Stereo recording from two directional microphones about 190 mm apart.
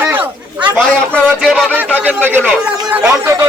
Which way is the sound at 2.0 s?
10° right (ahead or behind).